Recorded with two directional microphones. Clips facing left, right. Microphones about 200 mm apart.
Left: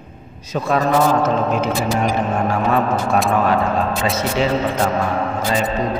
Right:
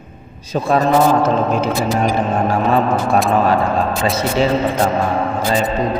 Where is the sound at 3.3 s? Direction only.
30° right (ahead or behind).